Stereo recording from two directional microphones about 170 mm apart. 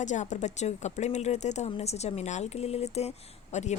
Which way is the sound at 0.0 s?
45° left (ahead or behind).